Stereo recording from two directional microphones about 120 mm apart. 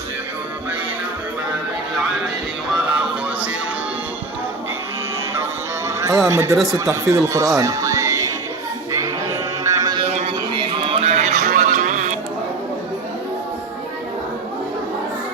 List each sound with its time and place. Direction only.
6.0 s speech: 25° right (ahead or behind)
8.9 s child singing: 25° right (ahead or behind)
9.6 s music: 35° right (ahead or behind)
10.0 s a sound: 60° right (ahead or behind)
10.6 s music: 45° right (ahead or behind); by 12.1 s 90° right